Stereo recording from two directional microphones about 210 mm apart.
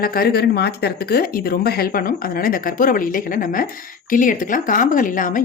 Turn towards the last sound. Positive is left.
turn(degrees=40)  # may be behind; listen again after turning